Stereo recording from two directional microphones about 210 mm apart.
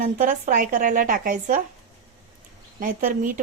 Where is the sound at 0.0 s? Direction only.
40° right (ahead or behind).